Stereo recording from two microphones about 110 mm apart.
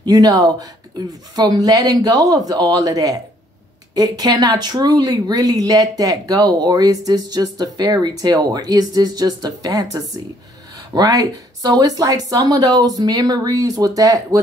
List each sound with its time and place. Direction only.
0.0 s speech: 35° right (ahead or behind)